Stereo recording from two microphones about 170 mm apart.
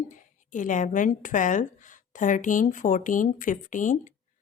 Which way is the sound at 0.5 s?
50° left (ahead or behind).